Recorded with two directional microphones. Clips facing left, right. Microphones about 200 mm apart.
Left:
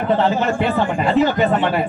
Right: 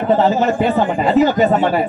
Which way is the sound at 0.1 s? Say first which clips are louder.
Right 3 dB; 40° right (ahead or behind).